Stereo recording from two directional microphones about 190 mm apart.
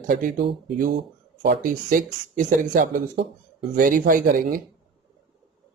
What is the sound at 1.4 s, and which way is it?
Speech, 50° right (ahead or behind).